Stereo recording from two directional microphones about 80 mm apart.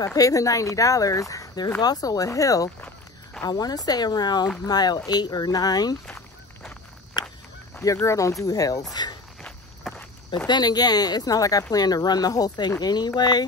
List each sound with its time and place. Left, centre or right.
0.0 s speech: left
1.8 s speech: left
3.4 s speech: left
7.2 s walk: left
8.0 s speech: left
8.9 s speech: left
9.8 s walk: centre
10.3 s speech: left